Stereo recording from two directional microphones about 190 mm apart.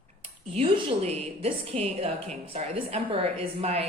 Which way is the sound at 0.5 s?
30° right (ahead or behind).